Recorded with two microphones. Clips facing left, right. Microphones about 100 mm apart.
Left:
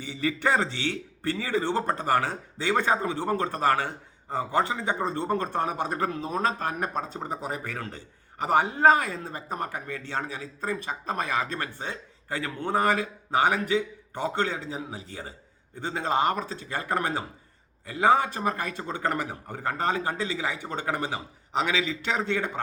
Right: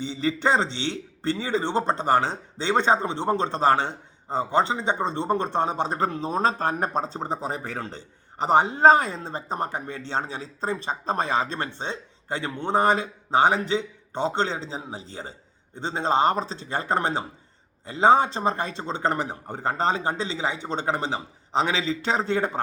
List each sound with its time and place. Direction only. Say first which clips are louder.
0.0 s a man's voice: right 3 dB; 25° right (ahead or behind)